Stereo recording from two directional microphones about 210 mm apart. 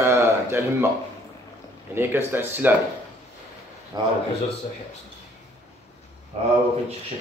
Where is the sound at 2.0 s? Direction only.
10° right (ahead or behind).